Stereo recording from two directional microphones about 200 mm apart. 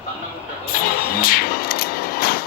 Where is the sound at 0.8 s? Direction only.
45° left (ahead or behind).